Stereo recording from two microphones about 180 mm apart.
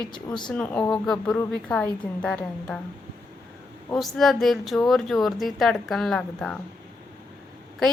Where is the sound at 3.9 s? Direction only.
Centre (ahead or behind).